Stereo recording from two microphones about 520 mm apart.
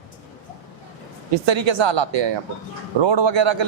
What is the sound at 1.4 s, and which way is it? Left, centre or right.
Speech, right.